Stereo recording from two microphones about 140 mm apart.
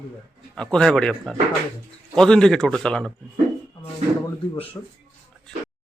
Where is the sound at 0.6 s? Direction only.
5° left (ahead or behind).